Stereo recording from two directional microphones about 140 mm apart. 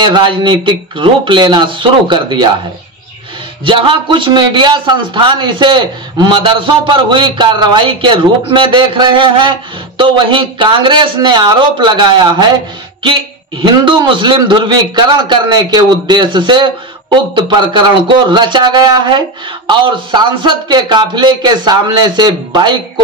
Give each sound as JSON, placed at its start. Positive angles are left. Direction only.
{"t": 0.0, "sound": "a man's voice", "side_deg": -35}
{"t": 3.6, "sound": "a man's voice", "side_deg": -35}